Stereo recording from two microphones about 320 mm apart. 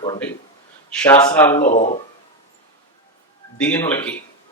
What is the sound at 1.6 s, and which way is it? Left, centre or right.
Speech, left.